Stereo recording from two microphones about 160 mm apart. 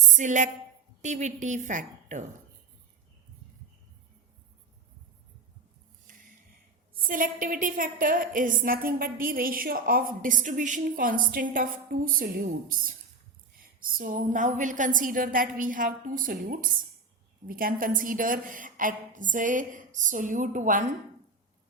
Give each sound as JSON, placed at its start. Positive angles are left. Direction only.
{"t": 0.1, "sound": "a woman's voice", "side_deg": -50}
{"t": 7.0, "sound": "a woman's voice", "side_deg": -60}